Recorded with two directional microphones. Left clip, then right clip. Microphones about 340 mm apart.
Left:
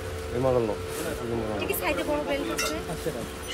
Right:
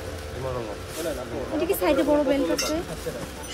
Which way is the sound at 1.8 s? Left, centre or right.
Right.